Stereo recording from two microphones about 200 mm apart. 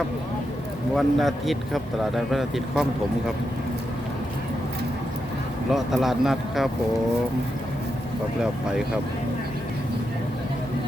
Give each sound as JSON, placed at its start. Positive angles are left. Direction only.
{"t": 0.9, "sound": "speech", "side_deg": 0}
{"t": 5.7, "sound": "speech", "side_deg": 0}